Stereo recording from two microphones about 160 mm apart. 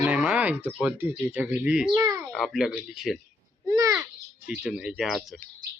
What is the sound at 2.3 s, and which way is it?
Speech, centre (ahead or behind).